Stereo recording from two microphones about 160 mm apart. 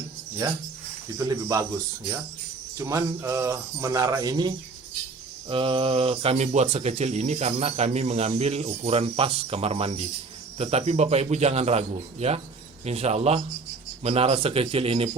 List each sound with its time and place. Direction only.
0.4 s speech: 20° right (ahead or behind)
2.7 s speech: 20° right (ahead or behind); by 15.1 s 35° right (ahead or behind)